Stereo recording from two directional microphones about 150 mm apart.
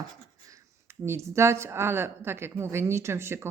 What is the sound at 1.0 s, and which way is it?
Speech, 20° right (ahead or behind).